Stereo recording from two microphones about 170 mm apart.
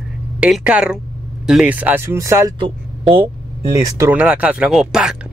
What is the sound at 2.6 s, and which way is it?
Speech, 30° right (ahead or behind).